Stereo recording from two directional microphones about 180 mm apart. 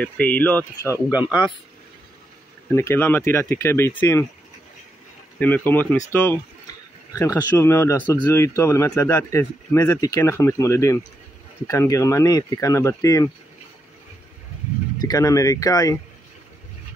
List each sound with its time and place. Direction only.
0.0 s speech: 10° left (ahead or behind)
2.7 s speech: 15° left (ahead or behind)
5.4 s speech: 10° left (ahead or behind)
15.0 s speech: 20° left (ahead or behind)